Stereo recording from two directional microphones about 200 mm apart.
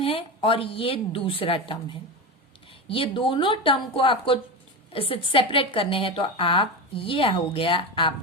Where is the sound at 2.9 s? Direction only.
25° left (ahead or behind).